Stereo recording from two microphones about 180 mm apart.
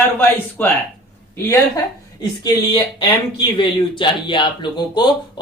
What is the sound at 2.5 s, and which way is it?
Speech, 25° left (ahead or behind).